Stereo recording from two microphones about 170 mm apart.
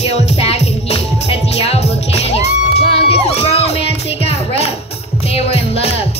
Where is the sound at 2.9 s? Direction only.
35° left (ahead or behind).